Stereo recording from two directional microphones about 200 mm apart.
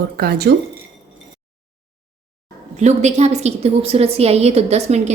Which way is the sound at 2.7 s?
35° right (ahead or behind).